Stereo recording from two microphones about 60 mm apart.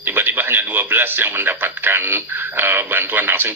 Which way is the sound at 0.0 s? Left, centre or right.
Right.